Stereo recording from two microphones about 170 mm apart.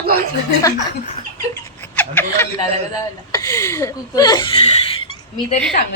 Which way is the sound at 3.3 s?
20° left (ahead or behind).